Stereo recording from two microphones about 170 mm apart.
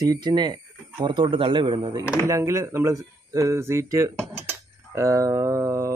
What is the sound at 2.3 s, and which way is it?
Speech, 15° right (ahead or behind).